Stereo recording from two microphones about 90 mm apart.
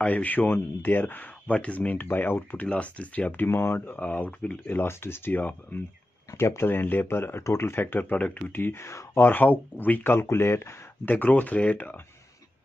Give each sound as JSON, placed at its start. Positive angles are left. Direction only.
{"t": 0.0, "sound": "speech", "side_deg": 20}
{"t": 4.7, "sound": "speech", "side_deg": 25}